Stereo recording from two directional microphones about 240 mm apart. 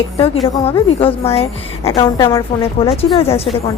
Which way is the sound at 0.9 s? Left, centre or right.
Left.